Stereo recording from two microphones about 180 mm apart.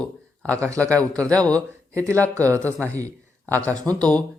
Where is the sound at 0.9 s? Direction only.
5° left (ahead or behind).